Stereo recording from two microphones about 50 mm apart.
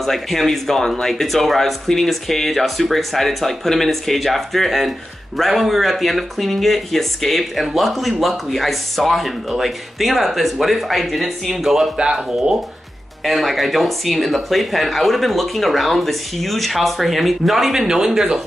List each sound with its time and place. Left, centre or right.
0.0 s speech: centre
12.0 s speech: centre
13.2 s speech: centre